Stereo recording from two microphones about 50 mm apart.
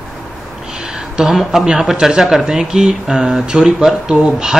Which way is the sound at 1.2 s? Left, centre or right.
Centre.